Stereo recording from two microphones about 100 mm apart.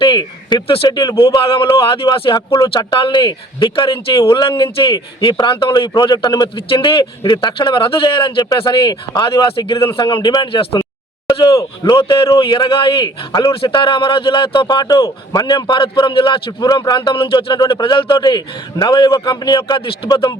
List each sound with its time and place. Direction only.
0.0 s a sound: 45° left (ahead or behind)
0.9 s a man's voice: 40° left (ahead or behind)
1.2 s a man's voice: 55° left (ahead or behind)